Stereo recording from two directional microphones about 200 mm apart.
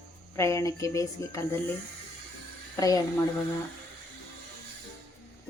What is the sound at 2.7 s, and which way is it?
Speech, 15° left (ahead or behind).